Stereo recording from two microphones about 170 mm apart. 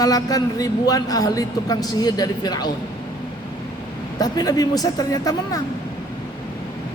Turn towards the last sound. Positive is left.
turn(degrees=20)  # may be behind; listen again after turning